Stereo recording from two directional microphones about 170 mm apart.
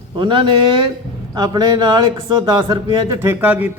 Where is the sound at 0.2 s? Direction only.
30° right (ahead or behind).